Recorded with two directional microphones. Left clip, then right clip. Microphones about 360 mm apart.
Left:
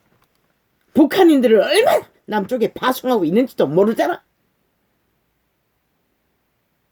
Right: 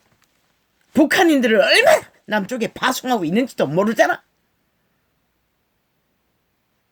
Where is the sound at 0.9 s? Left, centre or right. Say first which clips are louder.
Left 2 dB; right.